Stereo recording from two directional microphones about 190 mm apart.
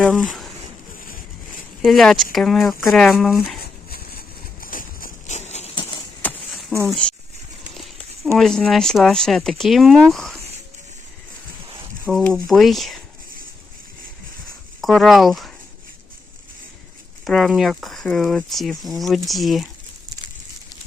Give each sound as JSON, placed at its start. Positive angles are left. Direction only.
{"t": 0.1, "sound": "speech", "side_deg": 0}
{"t": 1.8, "sound": "speech", "side_deg": 0}
{"t": 3.6, "sound": "a sound", "side_deg": 50}
{"t": 6.2, "sound": "a sound", "side_deg": 0}
{"t": 6.8, "sound": "speech", "side_deg": 5}
{"t": 8.4, "sound": "speech", "side_deg": 5}
{"t": 12.1, "sound": "speech", "side_deg": 0}
{"t": 14.8, "sound": "speech", "side_deg": 0}
{"t": 17.2, "sound": "speech", "side_deg": 0}